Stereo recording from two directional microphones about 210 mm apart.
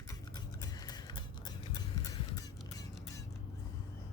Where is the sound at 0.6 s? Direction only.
20° left (ahead or behind).